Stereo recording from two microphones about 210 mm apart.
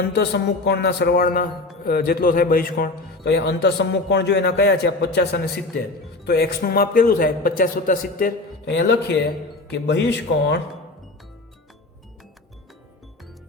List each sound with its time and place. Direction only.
0.3 s a man's voice: 55° left (ahead or behind)
8.7 s a man's voice: 55° left (ahead or behind)